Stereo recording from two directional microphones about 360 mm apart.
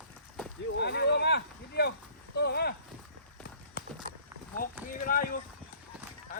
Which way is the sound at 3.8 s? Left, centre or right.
Left.